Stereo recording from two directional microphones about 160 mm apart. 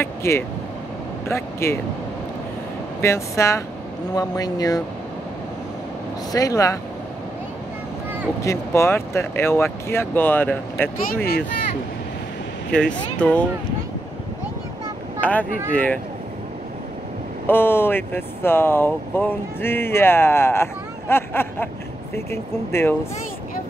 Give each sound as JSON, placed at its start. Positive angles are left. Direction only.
{"t": 0.0, "sound": "speech", "side_deg": 15}
{"t": 3.0, "sound": "speech", "side_deg": 15}
{"t": 6.3, "sound": "speech", "side_deg": 20}
{"t": 8.4, "sound": "speech", "side_deg": 15}
{"t": 12.7, "sound": "speech", "side_deg": 5}
{"t": 15.1, "sound": "speech", "side_deg": 10}
{"t": 17.5, "sound": "speech", "side_deg": 15}